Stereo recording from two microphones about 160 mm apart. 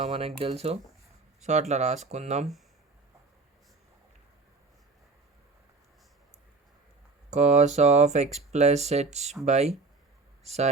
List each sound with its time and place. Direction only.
0.1 s speech: 35° right (ahead or behind)
7.3 s speech: 45° right (ahead or behind)